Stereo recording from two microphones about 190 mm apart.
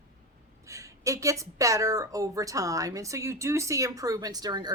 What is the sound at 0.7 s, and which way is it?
Speech, 15° right (ahead or behind).